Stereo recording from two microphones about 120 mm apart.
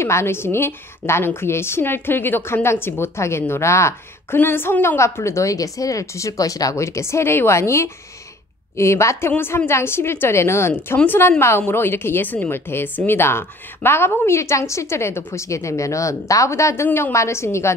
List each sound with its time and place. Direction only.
0.0 s a woman's voice: 20° left (ahead or behind)